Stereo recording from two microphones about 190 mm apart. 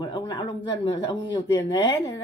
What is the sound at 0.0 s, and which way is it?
Speech, 25° left (ahead or behind).